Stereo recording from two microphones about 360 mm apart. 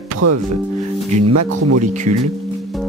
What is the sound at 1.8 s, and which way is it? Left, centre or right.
Speech, centre.